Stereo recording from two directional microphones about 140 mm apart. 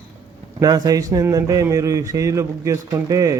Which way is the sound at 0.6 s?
25° right (ahead or behind).